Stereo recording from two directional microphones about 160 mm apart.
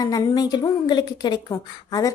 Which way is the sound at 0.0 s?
20° left (ahead or behind).